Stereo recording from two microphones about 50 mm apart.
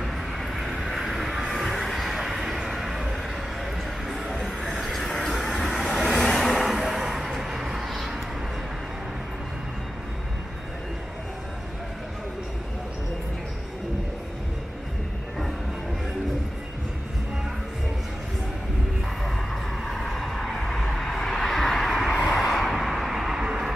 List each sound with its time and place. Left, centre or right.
0.4 s vehicle: centre
19.9 s a sound: centre
22.5 s vehicle: centre